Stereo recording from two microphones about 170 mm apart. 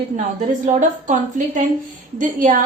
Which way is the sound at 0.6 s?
45° right (ahead or behind).